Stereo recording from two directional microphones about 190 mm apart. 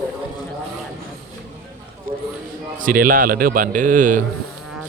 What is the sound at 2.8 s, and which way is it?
Speech, 45° right (ahead or behind).